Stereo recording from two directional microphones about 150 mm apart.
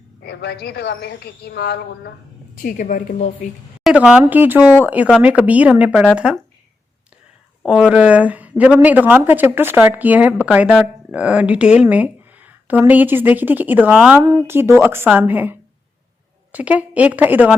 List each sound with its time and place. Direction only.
0.2 s a woman's voice: 90° left
2.6 s a woman's voice: 65° left (ahead or behind)
3.2 s speech: 45° left (ahead or behind)
3.8 s speech: 5° right (ahead or behind)
7.6 s speech: 5° right (ahead or behind)